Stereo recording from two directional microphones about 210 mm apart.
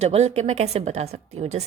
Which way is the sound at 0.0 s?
30° right (ahead or behind).